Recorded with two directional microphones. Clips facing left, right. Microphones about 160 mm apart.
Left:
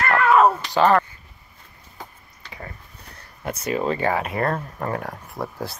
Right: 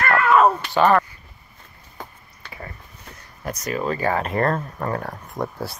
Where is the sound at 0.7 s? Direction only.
25° left (ahead or behind).